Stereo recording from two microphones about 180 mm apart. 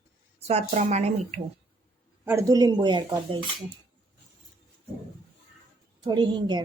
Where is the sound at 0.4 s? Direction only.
35° right (ahead or behind).